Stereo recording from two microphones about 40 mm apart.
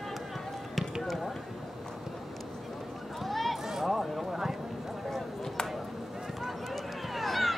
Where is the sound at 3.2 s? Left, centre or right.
Centre.